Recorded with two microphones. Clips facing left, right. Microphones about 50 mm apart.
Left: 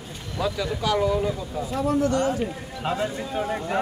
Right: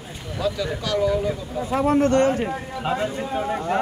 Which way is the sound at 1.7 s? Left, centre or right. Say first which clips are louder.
Right 5 dB; right.